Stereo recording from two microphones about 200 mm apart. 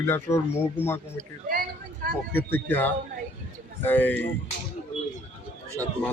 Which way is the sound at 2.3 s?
10° left (ahead or behind).